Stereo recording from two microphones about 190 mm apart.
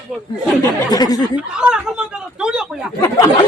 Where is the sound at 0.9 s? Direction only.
20° left (ahead or behind).